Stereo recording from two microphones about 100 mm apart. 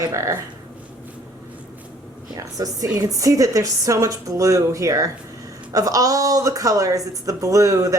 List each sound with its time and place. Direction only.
0.1 s a woman's voice: 30° right (ahead or behind)
2.3 s a woman's voice: 35° right (ahead or behind)